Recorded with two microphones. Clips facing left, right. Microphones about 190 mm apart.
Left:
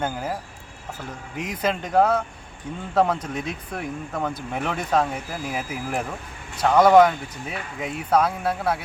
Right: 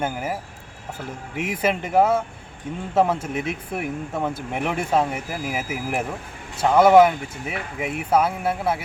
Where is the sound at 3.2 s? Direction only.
25° right (ahead or behind).